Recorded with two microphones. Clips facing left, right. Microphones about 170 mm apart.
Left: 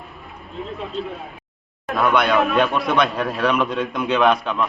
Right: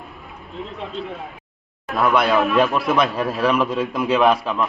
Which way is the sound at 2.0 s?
5° right (ahead or behind).